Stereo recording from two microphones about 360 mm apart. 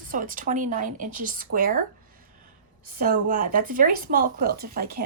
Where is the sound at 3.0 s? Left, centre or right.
Right.